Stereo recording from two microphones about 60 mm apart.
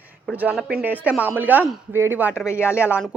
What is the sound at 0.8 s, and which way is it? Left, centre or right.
A woman's voice, right.